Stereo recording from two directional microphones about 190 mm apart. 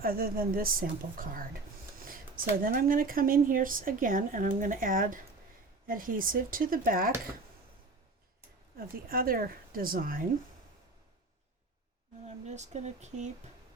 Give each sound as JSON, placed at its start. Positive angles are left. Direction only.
{"t": 0.0, "sound": "speech", "side_deg": -50}
{"t": 9.0, "sound": "speech", "side_deg": -50}
{"t": 12.2, "sound": "speech", "side_deg": -35}